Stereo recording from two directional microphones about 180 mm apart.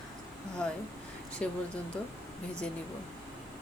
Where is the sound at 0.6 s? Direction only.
5° left (ahead or behind).